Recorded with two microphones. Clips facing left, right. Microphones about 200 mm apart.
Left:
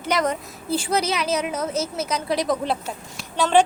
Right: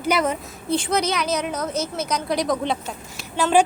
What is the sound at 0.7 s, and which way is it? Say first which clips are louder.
A woman's voice: right 1 dB; 5° left (ahead or behind).